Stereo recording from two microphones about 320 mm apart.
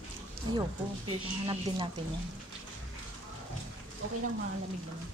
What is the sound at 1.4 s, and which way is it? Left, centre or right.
Speech, centre.